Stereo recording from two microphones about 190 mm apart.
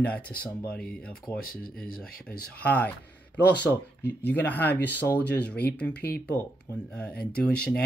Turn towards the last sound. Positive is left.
turn(degrees=5)  # may be behind; listen again after turning